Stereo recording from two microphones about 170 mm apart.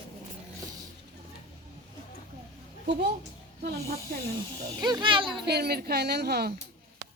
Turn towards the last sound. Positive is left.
turn(degrees=-75)  # may be behind; listen again after turning